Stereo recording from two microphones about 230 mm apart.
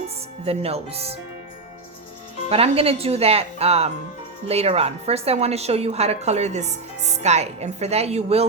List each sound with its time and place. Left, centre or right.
0.4 s a woman's voice: right
2.5 s a woman's voice: right